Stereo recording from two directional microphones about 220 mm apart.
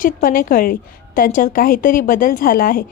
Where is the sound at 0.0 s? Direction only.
40° left (ahead or behind).